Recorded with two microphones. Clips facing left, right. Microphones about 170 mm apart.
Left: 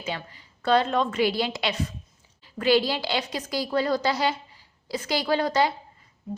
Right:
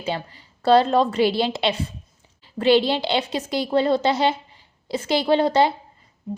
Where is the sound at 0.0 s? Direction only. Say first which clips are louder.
Right 5 dB; 30° right (ahead or behind).